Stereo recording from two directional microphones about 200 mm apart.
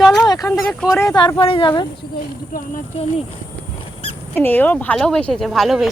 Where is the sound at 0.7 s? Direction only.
5° left (ahead or behind).